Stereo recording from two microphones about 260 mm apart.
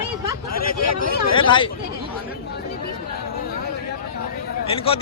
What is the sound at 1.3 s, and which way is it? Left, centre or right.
Speech, centre.